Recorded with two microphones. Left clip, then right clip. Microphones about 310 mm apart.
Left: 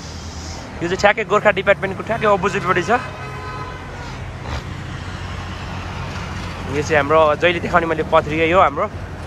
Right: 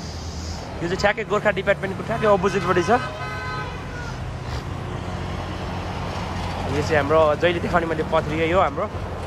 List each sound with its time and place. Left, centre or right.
0.8 s speech: centre
6.8 s speech: centre